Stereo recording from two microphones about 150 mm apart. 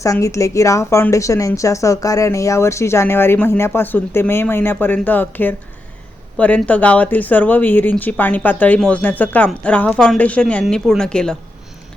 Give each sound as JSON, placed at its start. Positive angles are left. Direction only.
{"t": 0.0, "sound": "speech", "side_deg": 20}